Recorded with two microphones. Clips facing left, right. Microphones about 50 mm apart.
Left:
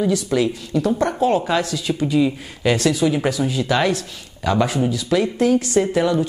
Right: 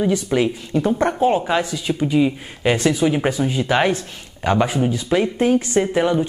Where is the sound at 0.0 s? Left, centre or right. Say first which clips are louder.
Even; right.